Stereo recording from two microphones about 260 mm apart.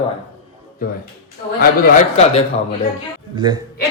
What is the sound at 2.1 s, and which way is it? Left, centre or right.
Speech, left.